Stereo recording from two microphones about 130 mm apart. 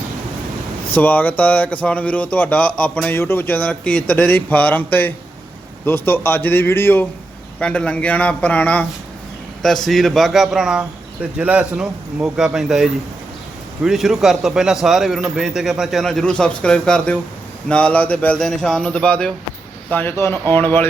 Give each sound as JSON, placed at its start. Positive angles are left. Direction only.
{"t": 0.9, "sound": "a man's voice", "side_deg": 15}